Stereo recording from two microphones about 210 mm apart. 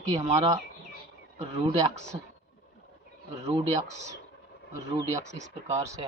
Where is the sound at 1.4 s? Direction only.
30° right (ahead or behind).